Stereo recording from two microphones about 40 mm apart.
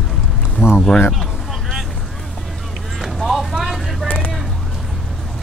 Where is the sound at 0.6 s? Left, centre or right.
Left.